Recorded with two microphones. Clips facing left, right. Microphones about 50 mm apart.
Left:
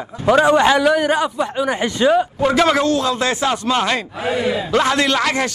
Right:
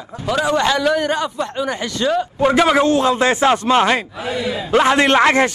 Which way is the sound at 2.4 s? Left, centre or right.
Centre.